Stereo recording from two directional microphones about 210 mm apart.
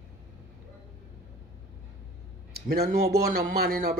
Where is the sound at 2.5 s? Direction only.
50° right (ahead or behind).